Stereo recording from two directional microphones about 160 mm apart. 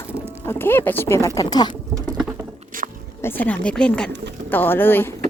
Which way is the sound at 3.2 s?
15° left (ahead or behind).